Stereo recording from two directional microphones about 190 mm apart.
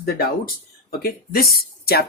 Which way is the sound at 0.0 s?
50° left (ahead or behind).